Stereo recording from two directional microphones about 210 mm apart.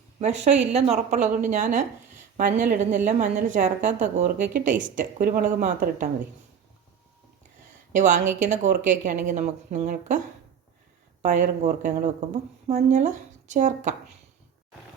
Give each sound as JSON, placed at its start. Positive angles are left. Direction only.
{"t": 0.7, "sound": "speech", "side_deg": -30}
{"t": 7.9, "sound": "speech", "side_deg": -35}
{"t": 11.2, "sound": "speech", "side_deg": -35}